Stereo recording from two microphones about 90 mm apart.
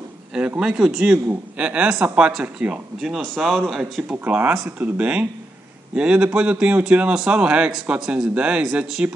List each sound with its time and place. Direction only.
0.6 s a man's voice: 5° right (ahead or behind)
4.2 s a man's voice: 20° right (ahead or behind)